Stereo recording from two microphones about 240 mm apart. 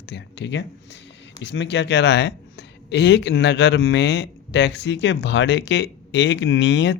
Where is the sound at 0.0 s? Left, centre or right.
Left.